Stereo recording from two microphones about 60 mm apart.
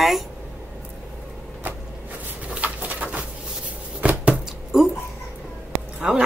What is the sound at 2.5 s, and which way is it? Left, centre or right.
Pigeon, right.